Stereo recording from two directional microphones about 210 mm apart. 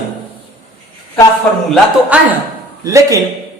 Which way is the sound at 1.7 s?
5° right (ahead or behind).